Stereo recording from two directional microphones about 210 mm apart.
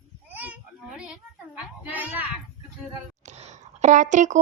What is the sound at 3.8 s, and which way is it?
Speech, 35° right (ahead or behind).